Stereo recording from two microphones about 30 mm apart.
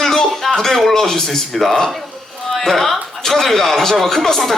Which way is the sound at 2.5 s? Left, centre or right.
Centre.